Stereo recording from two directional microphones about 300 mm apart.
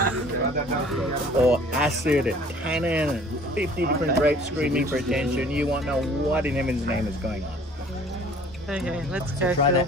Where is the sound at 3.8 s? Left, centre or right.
Right.